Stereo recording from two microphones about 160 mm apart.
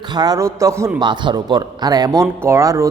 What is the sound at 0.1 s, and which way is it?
Speech, 25° right (ahead or behind).